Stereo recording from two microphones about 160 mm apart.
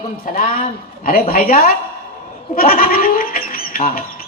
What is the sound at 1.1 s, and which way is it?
A woman's voice, 65° left (ahead or behind).